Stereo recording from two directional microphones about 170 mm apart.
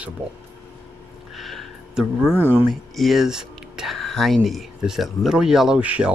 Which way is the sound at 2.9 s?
Centre (ahead or behind).